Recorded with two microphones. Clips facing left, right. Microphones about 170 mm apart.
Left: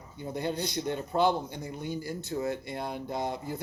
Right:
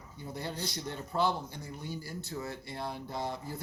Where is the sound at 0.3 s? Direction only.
20° left (ahead or behind).